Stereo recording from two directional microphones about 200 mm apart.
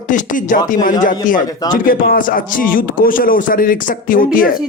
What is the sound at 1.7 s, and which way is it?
Speech, 45° left (ahead or behind).